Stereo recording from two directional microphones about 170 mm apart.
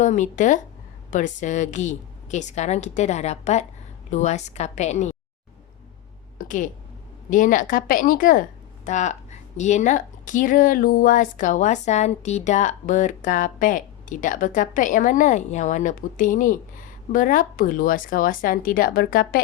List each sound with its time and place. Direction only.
0.0 s a woman's voice: 45° left (ahead or behind)
6.4 s a sound: 50° left (ahead or behind)
7.3 s a woman's voice: 50° left (ahead or behind)